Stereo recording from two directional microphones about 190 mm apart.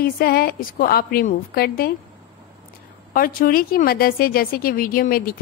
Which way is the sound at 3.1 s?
50° left (ahead or behind).